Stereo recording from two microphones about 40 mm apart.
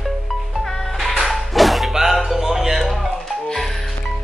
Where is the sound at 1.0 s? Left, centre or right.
Centre.